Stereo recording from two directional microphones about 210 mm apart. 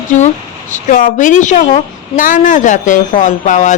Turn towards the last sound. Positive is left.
turn(degrees=35)  # may be behind; listen again after turning